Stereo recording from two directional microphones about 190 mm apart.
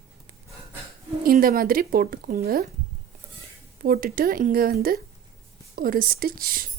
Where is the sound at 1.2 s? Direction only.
50° right (ahead or behind).